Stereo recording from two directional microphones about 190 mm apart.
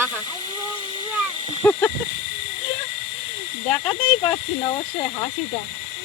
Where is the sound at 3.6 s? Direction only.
5° left (ahead or behind).